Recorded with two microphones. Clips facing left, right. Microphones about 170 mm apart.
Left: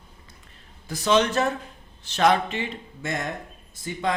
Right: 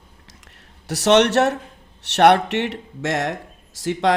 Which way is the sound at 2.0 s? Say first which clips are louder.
Right 6 dB; 75° right (ahead or behind).